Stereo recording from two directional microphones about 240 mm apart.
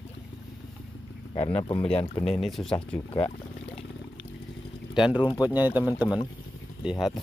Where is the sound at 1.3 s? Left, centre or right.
Left.